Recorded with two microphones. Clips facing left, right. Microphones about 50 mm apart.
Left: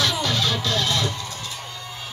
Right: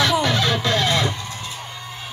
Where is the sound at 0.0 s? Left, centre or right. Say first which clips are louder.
Right 4 dB; right.